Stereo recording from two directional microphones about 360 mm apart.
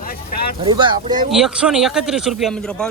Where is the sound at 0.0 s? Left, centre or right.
Left.